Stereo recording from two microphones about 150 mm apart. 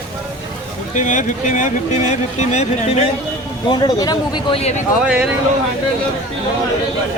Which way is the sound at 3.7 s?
25° left (ahead or behind).